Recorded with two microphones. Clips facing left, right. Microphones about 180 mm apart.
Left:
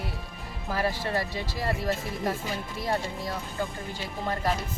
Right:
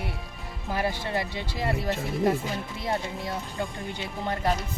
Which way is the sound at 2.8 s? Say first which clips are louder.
Left 1 dB; 20° right (ahead or behind).